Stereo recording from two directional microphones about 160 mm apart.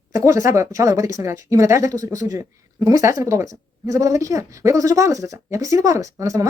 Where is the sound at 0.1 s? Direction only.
20° right (ahead or behind).